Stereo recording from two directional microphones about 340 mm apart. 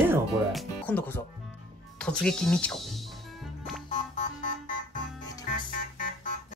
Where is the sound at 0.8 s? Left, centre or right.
Centre.